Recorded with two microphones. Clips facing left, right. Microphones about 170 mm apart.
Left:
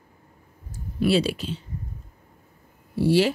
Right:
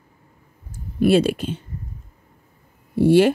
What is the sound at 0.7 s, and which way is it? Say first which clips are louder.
Speech: right 5 dB; 50° right (ahead or behind).